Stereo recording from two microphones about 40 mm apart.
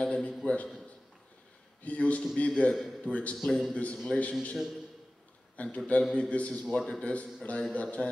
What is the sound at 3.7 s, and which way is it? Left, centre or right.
Speech, left.